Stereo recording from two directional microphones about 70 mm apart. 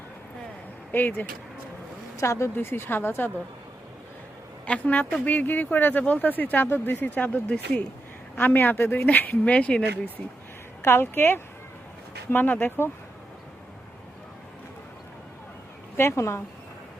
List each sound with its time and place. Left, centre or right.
0.9 s speech: left
2.1 s a woman's voice: left
4.6 s speech: centre
7.2 s speech: centre
8.4 s speech: left
10.8 s a woman's voice: left
16.0 s speech: left